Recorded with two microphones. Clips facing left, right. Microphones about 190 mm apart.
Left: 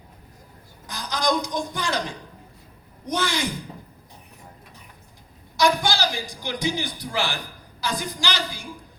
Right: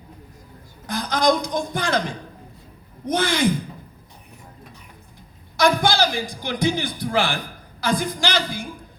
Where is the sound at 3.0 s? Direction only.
50° right (ahead or behind).